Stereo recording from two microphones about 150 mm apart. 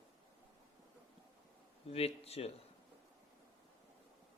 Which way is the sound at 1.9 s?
45° left (ahead or behind).